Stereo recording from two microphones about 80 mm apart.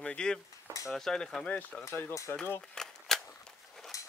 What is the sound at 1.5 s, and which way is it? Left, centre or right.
Speech, left.